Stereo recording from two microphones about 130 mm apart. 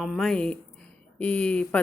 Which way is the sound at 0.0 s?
Centre (ahead or behind).